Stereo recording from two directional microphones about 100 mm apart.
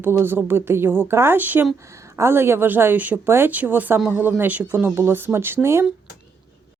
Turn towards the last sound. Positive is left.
turn(degrees=-25)  # may be behind; listen again after turning